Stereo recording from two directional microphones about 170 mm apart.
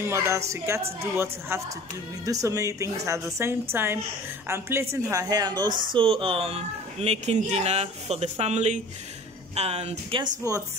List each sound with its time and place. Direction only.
0.0 s a woman's voice: 15° right (ahead or behind); by 10.2 s 40° right (ahead or behind)
10.4 s a woman's voice: 20° right (ahead or behind)